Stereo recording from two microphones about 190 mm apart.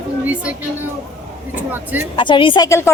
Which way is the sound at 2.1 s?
25° left (ahead or behind).